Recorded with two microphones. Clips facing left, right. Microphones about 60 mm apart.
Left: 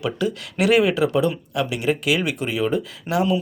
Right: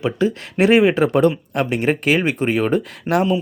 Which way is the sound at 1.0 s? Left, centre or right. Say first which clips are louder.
Right 4 dB; right.